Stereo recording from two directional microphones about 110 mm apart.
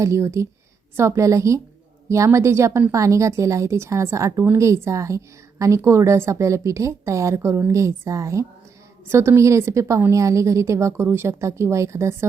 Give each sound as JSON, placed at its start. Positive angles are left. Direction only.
{"t": 0.0, "sound": "a woman's voice", "side_deg": -25}